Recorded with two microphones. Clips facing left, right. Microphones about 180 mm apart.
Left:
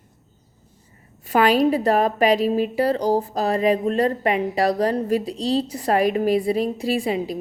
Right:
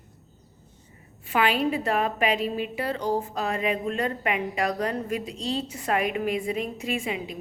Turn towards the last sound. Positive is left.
turn(degrees=35)  # may be behind; listen again after turning